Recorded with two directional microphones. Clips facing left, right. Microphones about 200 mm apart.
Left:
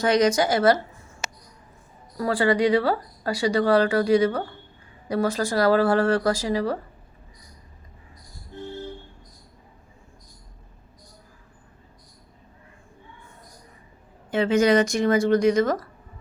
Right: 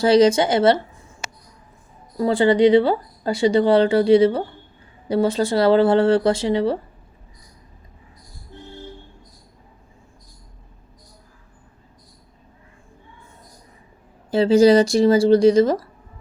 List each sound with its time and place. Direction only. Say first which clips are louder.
0.0 s speech: right 5 dB; 30° right (ahead or behind)
2.1 s speech: right 5 dB; 25° right (ahead or behind)
14.3 s speech: right 6 dB; 35° right (ahead or behind)